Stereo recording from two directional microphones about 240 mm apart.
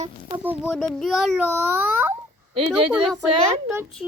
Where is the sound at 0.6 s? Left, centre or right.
Centre.